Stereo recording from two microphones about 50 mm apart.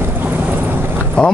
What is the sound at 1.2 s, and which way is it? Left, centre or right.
Speech, left.